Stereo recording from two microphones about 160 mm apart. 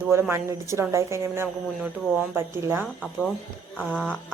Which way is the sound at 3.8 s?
5° left (ahead or behind).